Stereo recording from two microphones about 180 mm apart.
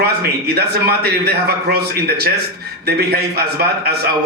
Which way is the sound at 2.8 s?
60° right (ahead or behind).